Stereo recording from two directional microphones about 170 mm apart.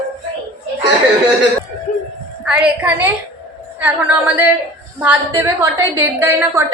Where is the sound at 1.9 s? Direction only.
50° left (ahead or behind).